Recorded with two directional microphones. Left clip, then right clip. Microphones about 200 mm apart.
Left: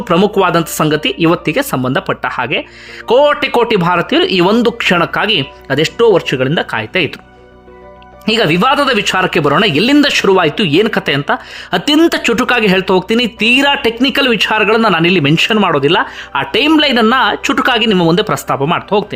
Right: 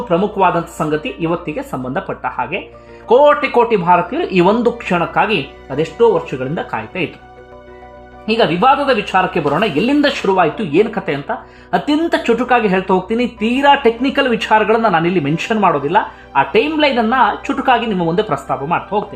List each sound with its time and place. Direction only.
0.1 s speech: 30° left (ahead or behind)
8.3 s speech: 30° left (ahead or behind)